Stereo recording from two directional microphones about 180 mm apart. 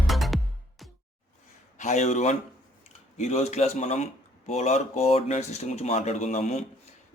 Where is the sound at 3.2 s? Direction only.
40° left (ahead or behind).